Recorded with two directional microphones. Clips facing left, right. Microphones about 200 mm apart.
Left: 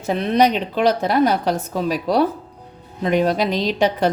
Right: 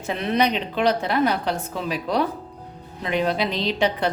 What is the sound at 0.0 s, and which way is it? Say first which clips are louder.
A woman's voice: left 5 dB; 40° left (ahead or behind).